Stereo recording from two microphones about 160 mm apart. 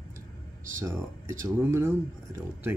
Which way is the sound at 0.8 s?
15° right (ahead or behind).